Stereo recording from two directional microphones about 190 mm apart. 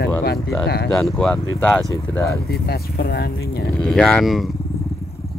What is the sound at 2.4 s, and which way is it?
Speech, 55° left (ahead or behind).